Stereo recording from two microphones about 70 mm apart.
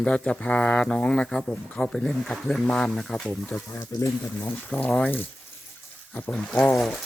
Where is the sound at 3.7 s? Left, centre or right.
Left.